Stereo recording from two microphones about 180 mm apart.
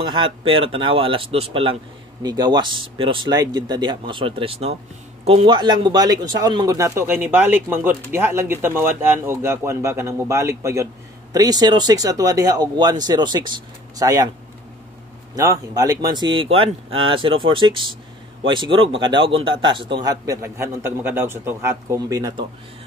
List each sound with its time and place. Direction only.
0.0 s a man's voice: 30° right (ahead or behind)
15.3 s a man's voice: 20° right (ahead or behind)